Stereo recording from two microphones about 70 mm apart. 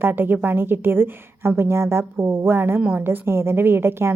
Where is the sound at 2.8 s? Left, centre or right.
Right.